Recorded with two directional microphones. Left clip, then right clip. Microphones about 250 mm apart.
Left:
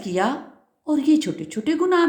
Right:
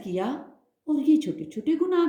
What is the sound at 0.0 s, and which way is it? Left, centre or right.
A woman's voice, left.